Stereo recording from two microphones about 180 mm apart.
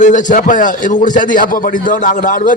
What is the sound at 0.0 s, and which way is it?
A man's voice, 45° left (ahead or behind).